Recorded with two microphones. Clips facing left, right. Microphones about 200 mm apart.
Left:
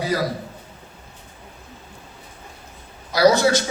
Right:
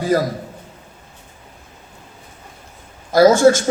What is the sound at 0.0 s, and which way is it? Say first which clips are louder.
Speech: right 5 dB; 50° right (ahead or behind).